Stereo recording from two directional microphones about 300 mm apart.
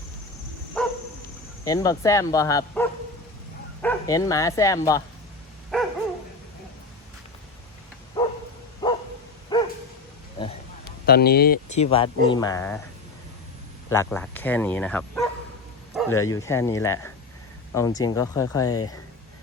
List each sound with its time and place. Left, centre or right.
0.8 s dog: centre
1.6 s speech: centre
5.7 s dog: centre
8.8 s bow-wow: centre
9.5 s dog: centre
11.0 s speech: left
11.9 s speech: centre
13.9 s speech: centre